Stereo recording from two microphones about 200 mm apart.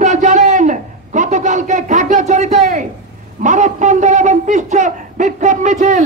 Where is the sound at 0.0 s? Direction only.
40° right (ahead or behind).